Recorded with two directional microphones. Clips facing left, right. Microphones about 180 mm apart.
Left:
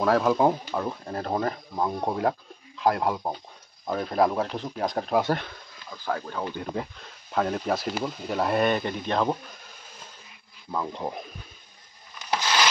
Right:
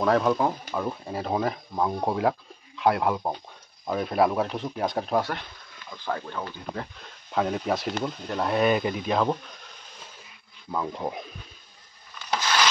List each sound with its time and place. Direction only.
0.0 s speech: centre (ahead or behind)
6.4 s speech: 15° left (ahead or behind)
7.0 s speech: centre (ahead or behind)
10.7 s speech: centre (ahead or behind)